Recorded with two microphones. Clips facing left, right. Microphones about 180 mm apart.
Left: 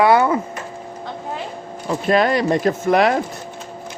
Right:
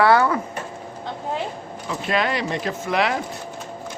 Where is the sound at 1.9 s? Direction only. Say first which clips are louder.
Left 7 dB; 45° left (ahead or behind).